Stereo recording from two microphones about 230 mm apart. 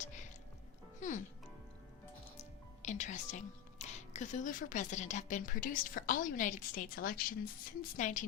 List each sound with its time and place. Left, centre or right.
0.9 s music: left
2.4 s a woman's voice: left